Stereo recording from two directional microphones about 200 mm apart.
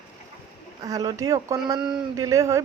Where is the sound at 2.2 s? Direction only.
15° right (ahead or behind).